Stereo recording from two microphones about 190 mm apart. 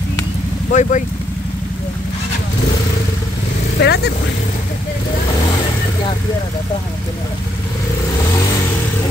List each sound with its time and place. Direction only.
0.7 s speech: 40° left (ahead or behind)
3.8 s speech: 60° left (ahead or behind)